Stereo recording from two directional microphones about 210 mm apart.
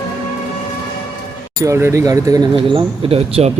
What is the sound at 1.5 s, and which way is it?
Speech, 15° right (ahead or behind).